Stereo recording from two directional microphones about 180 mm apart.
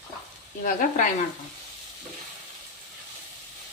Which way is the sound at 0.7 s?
45° left (ahead or behind).